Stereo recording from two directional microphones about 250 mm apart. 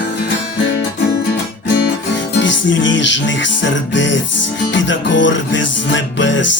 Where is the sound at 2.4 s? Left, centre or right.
Left.